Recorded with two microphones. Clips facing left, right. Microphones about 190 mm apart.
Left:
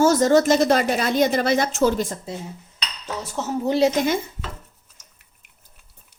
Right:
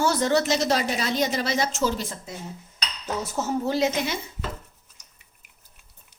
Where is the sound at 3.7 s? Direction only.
30° left (ahead or behind).